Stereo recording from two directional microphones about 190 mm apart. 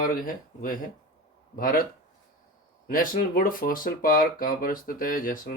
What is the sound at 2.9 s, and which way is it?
Speech, 45° left (ahead or behind).